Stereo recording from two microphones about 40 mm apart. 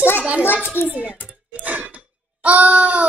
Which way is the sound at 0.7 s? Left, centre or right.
Left.